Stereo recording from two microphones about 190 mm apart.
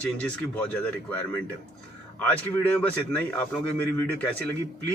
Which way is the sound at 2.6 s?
10° left (ahead or behind).